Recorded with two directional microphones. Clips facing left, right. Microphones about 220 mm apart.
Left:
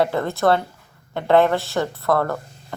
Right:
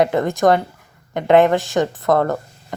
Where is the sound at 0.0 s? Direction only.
15° right (ahead or behind).